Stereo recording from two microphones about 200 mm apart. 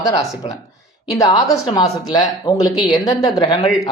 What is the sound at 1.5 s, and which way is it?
Speech, 20° left (ahead or behind).